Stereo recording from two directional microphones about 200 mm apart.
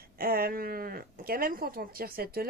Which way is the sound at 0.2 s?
50° right (ahead or behind).